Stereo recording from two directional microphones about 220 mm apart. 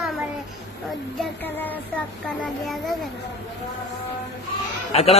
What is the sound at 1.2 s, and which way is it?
Child singing, 10° left (ahead or behind).